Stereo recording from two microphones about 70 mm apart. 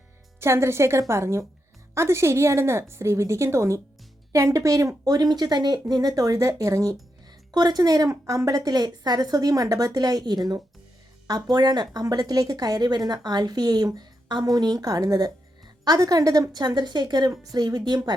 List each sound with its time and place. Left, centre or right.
0.3 s a woman's voice: right
5.9 s speech: right
7.5 s speech: right
11.5 s speech: right
16.5 s speech: right
17.4 s speech: right